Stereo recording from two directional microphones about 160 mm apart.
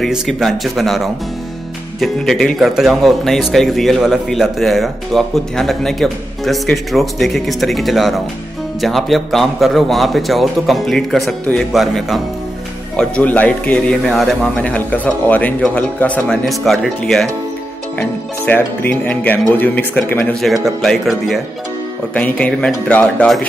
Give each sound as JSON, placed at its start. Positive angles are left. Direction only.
{"t": 0.0, "sound": "speech", "side_deg": 0}
{"t": 20.4, "sound": "speech", "side_deg": 0}